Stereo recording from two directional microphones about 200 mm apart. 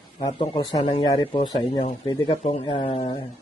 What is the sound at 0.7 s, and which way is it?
Speech, 35° left (ahead or behind).